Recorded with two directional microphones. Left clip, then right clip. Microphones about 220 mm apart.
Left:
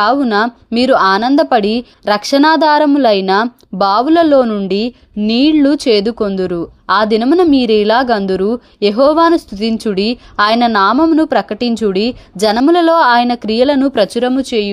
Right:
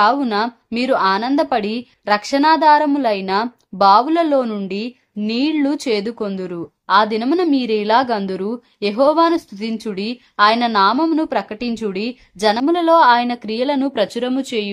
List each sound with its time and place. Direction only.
0.0 s speech: 25° left (ahead or behind)